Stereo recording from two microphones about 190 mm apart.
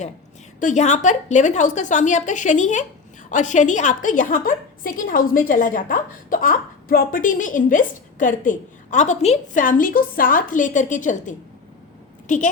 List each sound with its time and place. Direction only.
0.6 s a woman's voice: 40° left (ahead or behind)